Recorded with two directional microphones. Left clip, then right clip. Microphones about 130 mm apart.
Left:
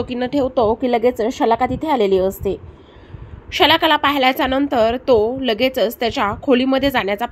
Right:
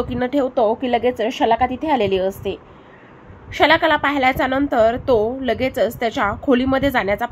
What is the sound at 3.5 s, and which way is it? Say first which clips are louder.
A woman's voice: left 1 dB; 40° left (ahead or behind).